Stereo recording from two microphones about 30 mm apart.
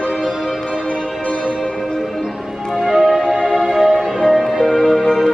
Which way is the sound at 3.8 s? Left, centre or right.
Centre.